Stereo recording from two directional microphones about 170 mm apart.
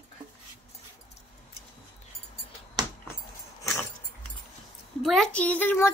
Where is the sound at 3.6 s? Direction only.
15° left (ahead or behind).